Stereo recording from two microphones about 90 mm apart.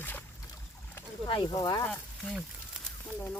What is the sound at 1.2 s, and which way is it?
Speech, 70° left (ahead or behind).